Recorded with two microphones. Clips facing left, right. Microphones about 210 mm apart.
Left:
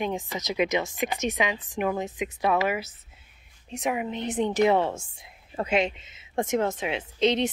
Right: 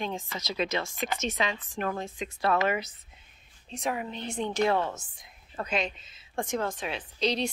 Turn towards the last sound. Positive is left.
turn(degrees=20)  # may be behind; listen again after turning